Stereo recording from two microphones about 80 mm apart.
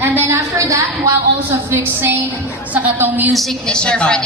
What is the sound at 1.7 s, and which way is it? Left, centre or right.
A woman's voice, right.